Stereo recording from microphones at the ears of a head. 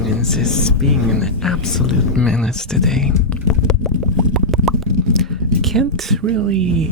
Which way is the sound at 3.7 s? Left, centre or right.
Left.